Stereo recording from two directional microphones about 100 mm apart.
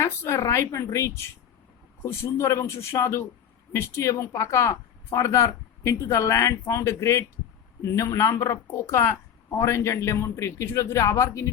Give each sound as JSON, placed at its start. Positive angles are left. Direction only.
{"t": 0.0, "sound": "speech", "side_deg": 25}